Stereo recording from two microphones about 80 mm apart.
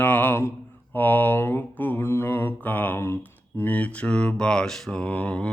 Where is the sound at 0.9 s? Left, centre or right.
Left.